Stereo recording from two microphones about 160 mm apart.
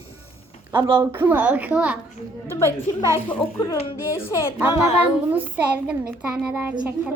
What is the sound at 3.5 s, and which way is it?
Child singing, 20° left (ahead or behind).